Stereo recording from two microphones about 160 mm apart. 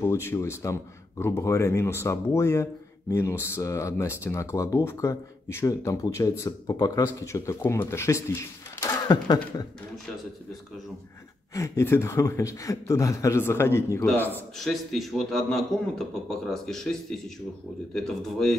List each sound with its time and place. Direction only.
0.0 s speech: 15° left (ahead or behind)
11.5 s speech: 20° left (ahead or behind)
14.7 s a man's voice: centre (ahead or behind)